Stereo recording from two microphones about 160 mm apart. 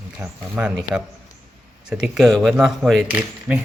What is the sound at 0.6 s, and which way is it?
Speech, 5° right (ahead or behind).